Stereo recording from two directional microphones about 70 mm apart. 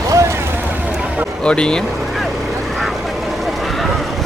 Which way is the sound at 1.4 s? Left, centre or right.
Centre.